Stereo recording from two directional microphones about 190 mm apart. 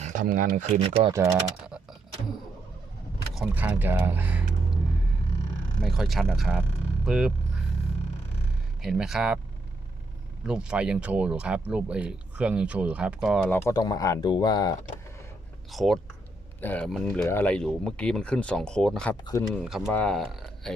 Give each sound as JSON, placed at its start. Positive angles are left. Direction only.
{"t": 0.0, "sound": "speech", "side_deg": -40}
{"t": 0.7, "sound": "speech", "side_deg": -30}
{"t": 1.2, "sound": "speech", "side_deg": -5}
{"t": 3.3, "sound": "speech", "side_deg": -10}
{"t": 5.8, "sound": "speech", "side_deg": 0}
{"t": 8.8, "sound": "speech", "side_deg": 0}
{"t": 10.4, "sound": "speech", "side_deg": -5}
{"t": 13.5, "sound": "speech", "side_deg": 15}
{"t": 15.7, "sound": "speech", "side_deg": 0}
{"t": 19.2, "sound": "speech", "side_deg": 20}
{"t": 19.5, "sound": "speech", "side_deg": 0}